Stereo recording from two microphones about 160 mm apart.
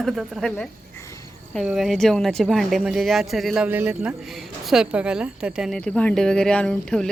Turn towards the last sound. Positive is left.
turn(degrees=5)  # may be behind; listen again after turning